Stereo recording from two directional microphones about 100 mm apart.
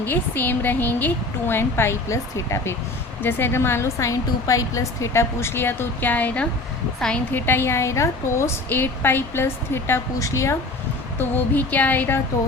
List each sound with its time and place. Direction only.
0.0 s a woman's voice: 20° left (ahead or behind)
7.3 s a woman's voice: 20° left (ahead or behind)
11.2 s a sound: 20° left (ahead or behind)